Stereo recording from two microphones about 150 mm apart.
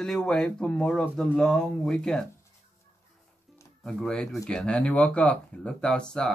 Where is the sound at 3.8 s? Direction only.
5° left (ahead or behind).